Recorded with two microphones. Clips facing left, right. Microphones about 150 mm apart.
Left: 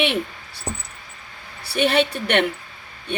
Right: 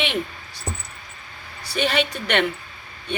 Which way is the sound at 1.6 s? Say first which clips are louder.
Left 4 dB; 65° left (ahead or behind).